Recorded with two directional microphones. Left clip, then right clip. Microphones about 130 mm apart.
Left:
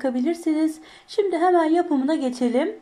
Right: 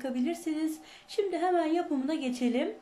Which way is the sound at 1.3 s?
Centre (ahead or behind).